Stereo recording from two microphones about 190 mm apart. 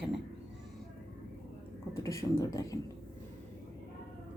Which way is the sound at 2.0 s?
15° left (ahead or behind).